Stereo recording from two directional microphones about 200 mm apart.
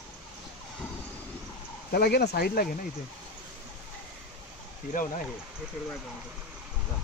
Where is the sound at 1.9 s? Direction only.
50° left (ahead or behind).